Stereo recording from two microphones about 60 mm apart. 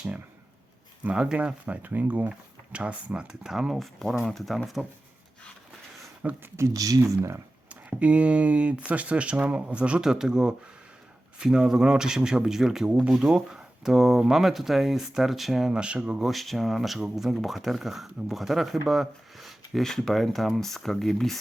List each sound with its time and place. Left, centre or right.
1.0 s speech: centre
1.6 s speech: right
2.7 s speech: centre
6.2 s speech: right
6.6 s speech: right
7.2 s speech: right
7.7 s speech: right
16.2 s speech: centre